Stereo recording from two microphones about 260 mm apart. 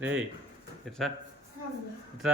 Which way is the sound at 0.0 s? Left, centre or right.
Centre.